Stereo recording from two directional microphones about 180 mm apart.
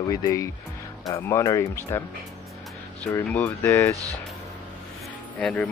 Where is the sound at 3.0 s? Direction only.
10° left (ahead or behind).